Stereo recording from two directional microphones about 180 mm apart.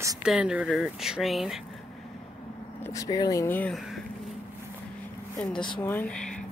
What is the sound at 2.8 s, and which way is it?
Speech, 20° left (ahead or behind).